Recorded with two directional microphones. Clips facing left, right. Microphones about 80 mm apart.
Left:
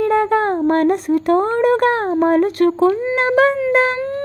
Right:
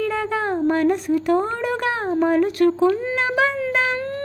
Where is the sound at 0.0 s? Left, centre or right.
Left.